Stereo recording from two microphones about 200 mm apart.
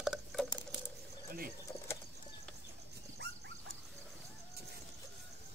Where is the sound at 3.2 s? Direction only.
55° right (ahead or behind).